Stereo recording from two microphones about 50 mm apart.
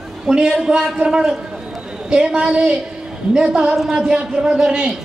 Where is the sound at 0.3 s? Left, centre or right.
Centre.